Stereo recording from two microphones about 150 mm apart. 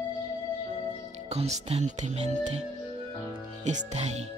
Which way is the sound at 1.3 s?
45° right (ahead or behind).